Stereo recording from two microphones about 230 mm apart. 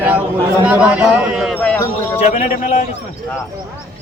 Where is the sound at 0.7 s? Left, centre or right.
Centre.